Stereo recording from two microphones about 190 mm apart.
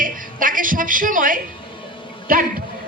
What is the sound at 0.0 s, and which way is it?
A woman's voice, 45° right (ahead or behind).